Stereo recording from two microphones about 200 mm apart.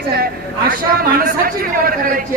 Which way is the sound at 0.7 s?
45° right (ahead or behind).